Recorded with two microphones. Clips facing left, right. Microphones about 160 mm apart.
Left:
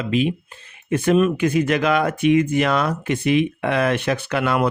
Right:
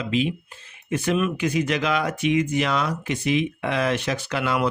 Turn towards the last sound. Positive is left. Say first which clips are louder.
# left 4 dB
turn(degrees=55)  # may be behind; listen again after turning